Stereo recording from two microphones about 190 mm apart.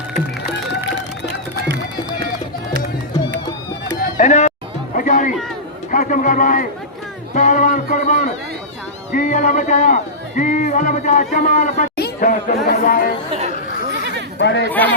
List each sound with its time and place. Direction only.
4.2 s music: 40° left (ahead or behind)
4.9 s a sound: 45° left (ahead or behind)
5.9 s a man's voice: 45° left (ahead or behind)
13.9 s a sound: 65° right (ahead or behind)
14.3 s speech: 65° left (ahead or behind)
14.7 s speech: 10° left (ahead or behind)